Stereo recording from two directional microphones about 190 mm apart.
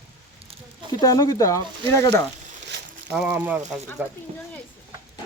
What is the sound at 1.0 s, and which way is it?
Speech, 20° left (ahead or behind).